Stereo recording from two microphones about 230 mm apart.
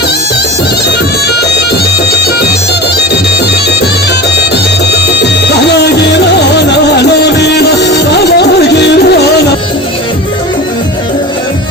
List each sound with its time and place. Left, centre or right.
6.7 s music: left